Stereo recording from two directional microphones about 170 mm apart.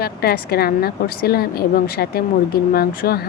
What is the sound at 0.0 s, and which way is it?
Speech, 65° left (ahead or behind).